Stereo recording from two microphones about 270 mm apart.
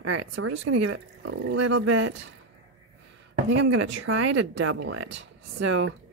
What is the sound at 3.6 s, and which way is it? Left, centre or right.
Speech, right.